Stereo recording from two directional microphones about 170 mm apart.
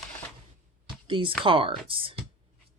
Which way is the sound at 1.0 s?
30° right (ahead or behind).